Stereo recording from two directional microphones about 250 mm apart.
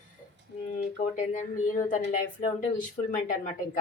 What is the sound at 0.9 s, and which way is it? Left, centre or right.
A woman's voice, left.